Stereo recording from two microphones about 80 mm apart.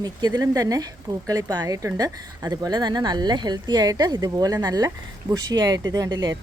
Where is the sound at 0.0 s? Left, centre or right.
Right.